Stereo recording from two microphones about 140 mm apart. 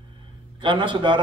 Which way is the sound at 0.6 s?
35° right (ahead or behind).